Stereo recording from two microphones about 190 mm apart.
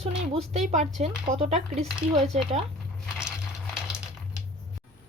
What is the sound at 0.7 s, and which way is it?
Speech, 40° right (ahead or behind).